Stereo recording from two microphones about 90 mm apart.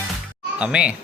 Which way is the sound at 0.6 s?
10° right (ahead or behind).